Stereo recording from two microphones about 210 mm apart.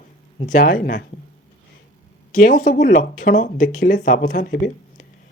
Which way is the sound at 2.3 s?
40° left (ahead or behind).